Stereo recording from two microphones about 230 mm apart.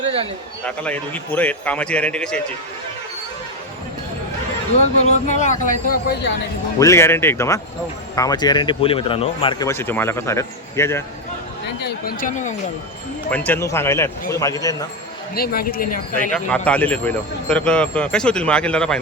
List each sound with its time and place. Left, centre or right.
0.6 s speech: centre
4.8 s speech: left
6.7 s speech: centre
11.8 s speech: left
13.3 s speech: centre
15.4 s speech: left
16.3 s speech: centre